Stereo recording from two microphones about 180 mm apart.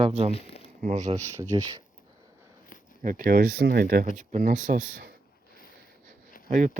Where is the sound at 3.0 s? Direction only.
50° right (ahead or behind).